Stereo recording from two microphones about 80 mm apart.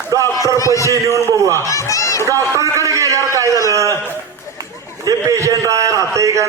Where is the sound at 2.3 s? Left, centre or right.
Right.